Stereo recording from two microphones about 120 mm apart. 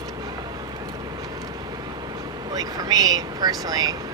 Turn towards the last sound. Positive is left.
turn(degrees=-35)  # may be behind; listen again after turning